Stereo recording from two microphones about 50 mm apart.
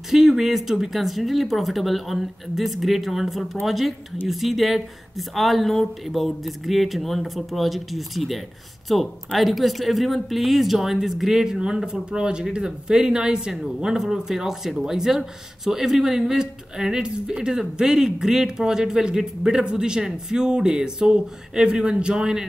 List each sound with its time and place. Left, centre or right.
0.1 s speech: centre